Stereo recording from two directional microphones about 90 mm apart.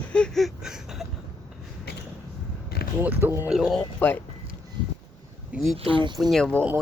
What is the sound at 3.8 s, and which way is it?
Speech, 20° left (ahead or behind).